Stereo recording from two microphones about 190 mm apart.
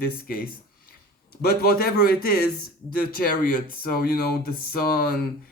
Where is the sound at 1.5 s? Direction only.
50° left (ahead or behind).